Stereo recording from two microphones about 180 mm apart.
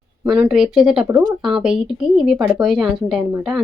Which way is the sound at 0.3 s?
5° right (ahead or behind).